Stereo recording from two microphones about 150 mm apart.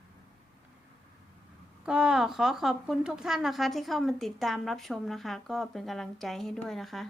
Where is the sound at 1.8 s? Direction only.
5° right (ahead or behind).